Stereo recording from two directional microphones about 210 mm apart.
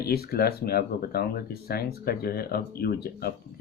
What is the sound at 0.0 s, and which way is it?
Speech, 50° left (ahead or behind).